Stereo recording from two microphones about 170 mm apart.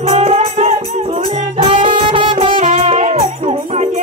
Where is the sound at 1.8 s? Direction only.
30° right (ahead or behind).